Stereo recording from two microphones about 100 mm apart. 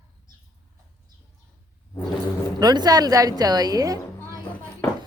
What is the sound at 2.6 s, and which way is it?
A woman's voice, 40° right (ahead or behind).